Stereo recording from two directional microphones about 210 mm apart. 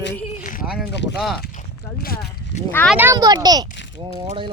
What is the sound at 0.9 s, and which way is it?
Speech, 55° left (ahead or behind).